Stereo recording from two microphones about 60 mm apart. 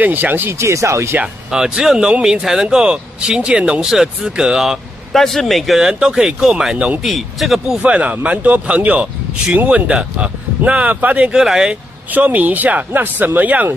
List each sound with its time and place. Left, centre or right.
0.0 s speech: right
0.6 s speech: right
1.2 s speech: centre
5.1 s speech: centre
5.8 s speech: centre
7.0 s speech: centre
7.8 s speech: right
11.3 s speech: centre
12.1 s speech: right